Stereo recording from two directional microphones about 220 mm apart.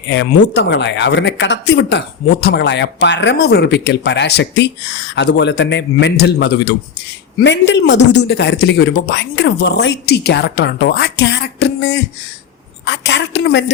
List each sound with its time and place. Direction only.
0.1 s speech: 50° left (ahead or behind)